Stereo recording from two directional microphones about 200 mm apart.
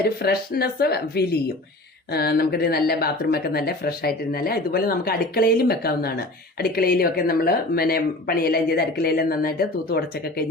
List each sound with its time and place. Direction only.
0.2 s speech: 50° left (ahead or behind)